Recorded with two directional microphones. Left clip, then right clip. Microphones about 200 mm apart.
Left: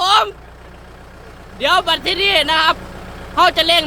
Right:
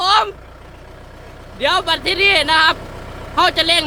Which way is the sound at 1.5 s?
5° left (ahead or behind).